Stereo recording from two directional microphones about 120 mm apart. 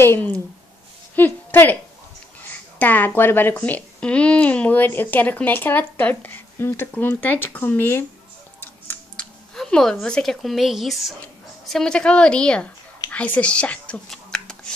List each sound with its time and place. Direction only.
0.0 s a woman's voice: 20° left (ahead or behind)
8.5 s music: 15° left (ahead or behind); by 11.1 s centre (ahead or behind)
11.7 s a woman's voice: 5° left (ahead or behind)
13.1 s whispering: 10° left (ahead or behind)